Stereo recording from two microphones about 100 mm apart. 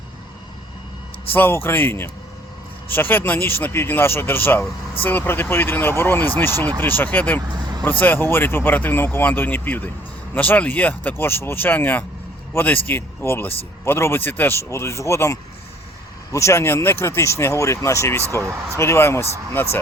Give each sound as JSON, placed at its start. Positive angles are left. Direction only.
{"t": 1.3, "sound": "speech", "side_deg": 20}